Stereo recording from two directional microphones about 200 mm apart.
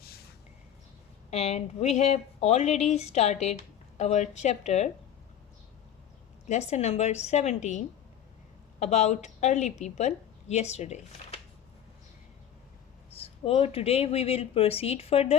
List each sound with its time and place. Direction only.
1.3 s a woman's voice: 30° left (ahead or behind)
6.5 s a woman's voice: 35° left (ahead or behind)
8.8 s a woman's voice: 35° left (ahead or behind)
13.1 s speech: 30° left (ahead or behind)